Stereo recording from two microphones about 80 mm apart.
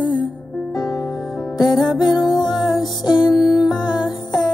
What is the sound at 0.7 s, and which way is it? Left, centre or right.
Music, left.